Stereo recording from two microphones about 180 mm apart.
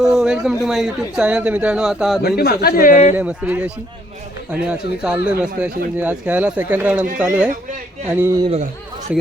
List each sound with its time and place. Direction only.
0.0 s a man's voice: 5° right (ahead or behind)
2.2 s speech: 60° left (ahead or behind)
3.2 s speech: 10° right (ahead or behind)
4.7 s speech: 5° right (ahead or behind)